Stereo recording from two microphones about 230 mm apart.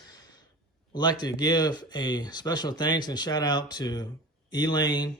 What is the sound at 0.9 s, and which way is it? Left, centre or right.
Speech, centre.